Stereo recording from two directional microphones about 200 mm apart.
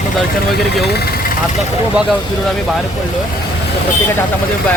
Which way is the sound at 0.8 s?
55° left (ahead or behind).